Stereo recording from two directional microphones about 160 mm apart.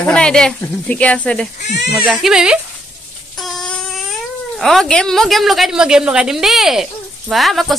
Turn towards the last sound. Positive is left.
turn(degrees=0)  # may be behind; listen again after turning